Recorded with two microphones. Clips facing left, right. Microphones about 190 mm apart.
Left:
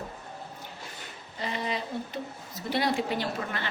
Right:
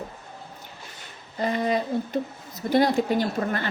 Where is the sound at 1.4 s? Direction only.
45° right (ahead or behind).